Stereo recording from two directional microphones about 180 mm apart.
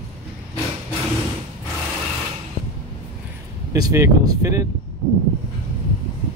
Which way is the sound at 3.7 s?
15° right (ahead or behind).